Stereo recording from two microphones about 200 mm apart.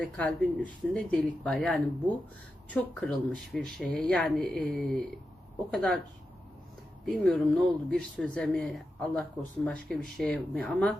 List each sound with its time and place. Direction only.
0.0 s speech: 5° left (ahead or behind)
7.0 s speech: centre (ahead or behind)